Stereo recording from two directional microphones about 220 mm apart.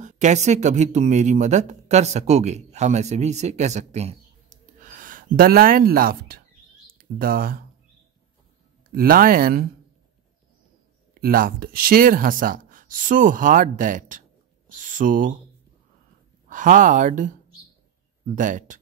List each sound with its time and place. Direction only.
0.0 s speech: 30° right (ahead or behind)
8.9 s speech: 40° right (ahead or behind)
11.1 s speech: 40° right (ahead or behind)
16.4 s speech: 35° right (ahead or behind)